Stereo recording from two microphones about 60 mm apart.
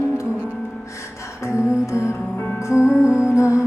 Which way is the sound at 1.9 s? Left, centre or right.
Left.